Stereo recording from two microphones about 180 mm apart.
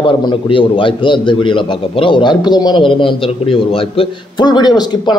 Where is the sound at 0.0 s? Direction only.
25° left (ahead or behind).